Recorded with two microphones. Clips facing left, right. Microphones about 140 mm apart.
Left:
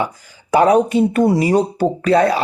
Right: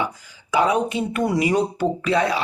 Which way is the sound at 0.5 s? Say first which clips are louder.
Left 7 dB; 45° left (ahead or behind).